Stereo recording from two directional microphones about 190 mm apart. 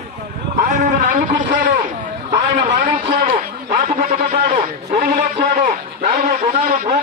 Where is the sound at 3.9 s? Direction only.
40° right (ahead or behind).